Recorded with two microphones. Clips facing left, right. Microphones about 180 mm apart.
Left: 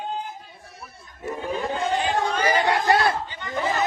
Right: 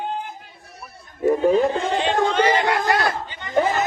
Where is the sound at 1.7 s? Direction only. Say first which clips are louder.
Right 2 dB; 25° right (ahead or behind).